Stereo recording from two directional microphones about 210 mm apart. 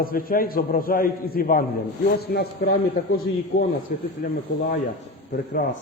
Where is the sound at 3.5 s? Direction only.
45° left (ahead or behind).